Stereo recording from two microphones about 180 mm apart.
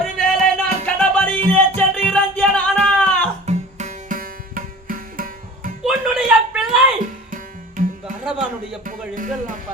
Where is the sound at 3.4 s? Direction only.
40° right (ahead or behind).